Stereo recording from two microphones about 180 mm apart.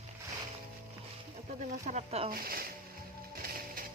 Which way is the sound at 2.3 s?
55° right (ahead or behind).